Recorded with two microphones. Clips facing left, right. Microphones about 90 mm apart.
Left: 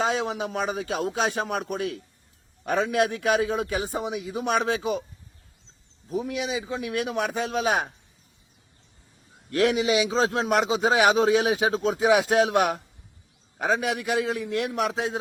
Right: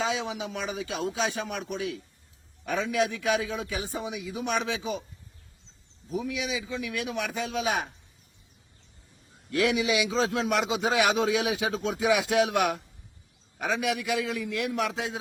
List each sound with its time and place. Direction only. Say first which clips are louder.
0.0 s a man's voice: left 4 dB; 45° left (ahead or behind)
2.6 s a man's voice: left 4 dB; 45° left (ahead or behind)
6.1 s a man's voice: left 3 dB; 45° left (ahead or behind)
9.5 s a man's voice: left 3 dB; 45° left (ahead or behind)